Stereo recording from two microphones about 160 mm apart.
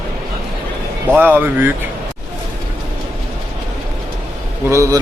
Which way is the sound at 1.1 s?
10° right (ahead or behind).